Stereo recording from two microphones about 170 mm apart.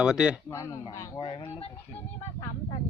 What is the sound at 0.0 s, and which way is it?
Speech, 5° right (ahead or behind).